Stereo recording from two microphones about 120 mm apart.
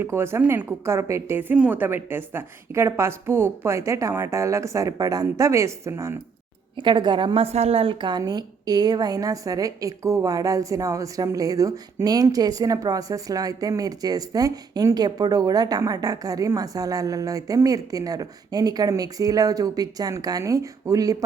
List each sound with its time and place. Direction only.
0.0 s a woman's voice: 20° right (ahead or behind)
6.7 s a woman's voice: 40° right (ahead or behind)